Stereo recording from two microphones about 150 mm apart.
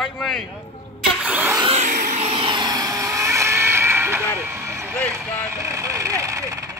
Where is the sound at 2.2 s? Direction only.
35° right (ahead or behind); by 4.9 s 20° right (ahead or behind).